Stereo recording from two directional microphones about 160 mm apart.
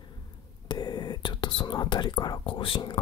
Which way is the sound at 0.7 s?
25° left (ahead or behind).